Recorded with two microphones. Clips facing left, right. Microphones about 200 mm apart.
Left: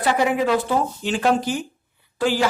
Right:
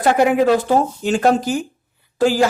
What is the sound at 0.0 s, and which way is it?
Speech, 50° right (ahead or behind).